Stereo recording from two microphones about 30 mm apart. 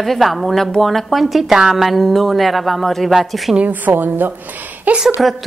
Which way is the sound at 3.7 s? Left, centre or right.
Right.